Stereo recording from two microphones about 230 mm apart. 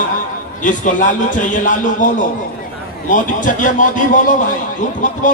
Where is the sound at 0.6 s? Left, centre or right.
Left.